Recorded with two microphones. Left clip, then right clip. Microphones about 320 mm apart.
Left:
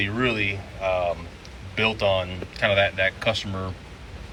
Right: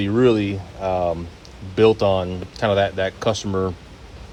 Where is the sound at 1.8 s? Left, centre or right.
Centre.